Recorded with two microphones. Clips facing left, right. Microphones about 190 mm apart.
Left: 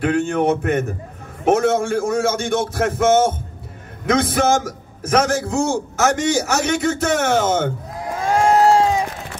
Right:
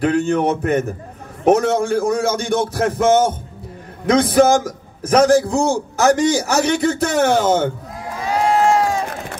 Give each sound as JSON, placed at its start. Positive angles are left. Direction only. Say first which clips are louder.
{"t": 0.0, "sound": "a man's voice", "louder": "right 1 dB", "side_deg": -40}
{"t": 8.2, "sound": "crowd", "louder": "left 2 dB", "side_deg": 45}
{"t": 8.7, "sound": "music", "louder": "left 2 dB", "side_deg": 25}